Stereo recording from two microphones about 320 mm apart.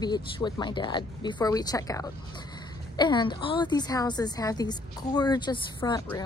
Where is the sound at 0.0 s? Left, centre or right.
Centre.